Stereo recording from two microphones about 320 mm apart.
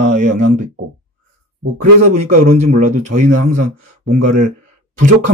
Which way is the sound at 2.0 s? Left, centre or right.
Right.